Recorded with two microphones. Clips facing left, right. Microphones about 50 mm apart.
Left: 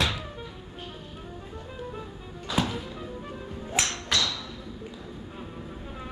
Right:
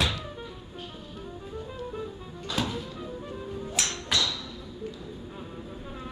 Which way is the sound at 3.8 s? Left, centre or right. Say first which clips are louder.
Left 4 dB; left.